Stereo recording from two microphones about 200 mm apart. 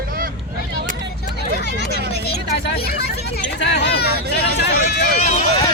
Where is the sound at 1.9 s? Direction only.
50° left (ahead or behind).